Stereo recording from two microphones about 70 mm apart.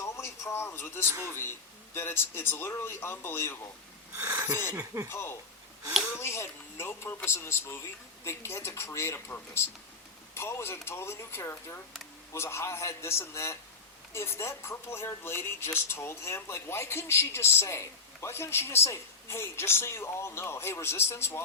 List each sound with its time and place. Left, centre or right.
0.0 s speech: left
1.0 s speech: right
2.0 s speech: left
4.3 s speech: right
5.0 s speech: left